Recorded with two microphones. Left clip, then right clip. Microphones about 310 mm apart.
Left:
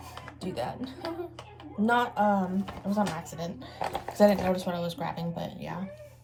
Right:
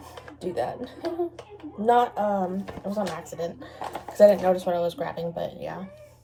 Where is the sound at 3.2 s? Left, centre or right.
Centre.